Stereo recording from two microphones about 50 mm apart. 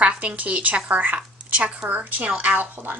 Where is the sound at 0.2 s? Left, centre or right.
Right.